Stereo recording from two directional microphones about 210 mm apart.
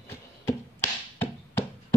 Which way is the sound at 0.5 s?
10° left (ahead or behind).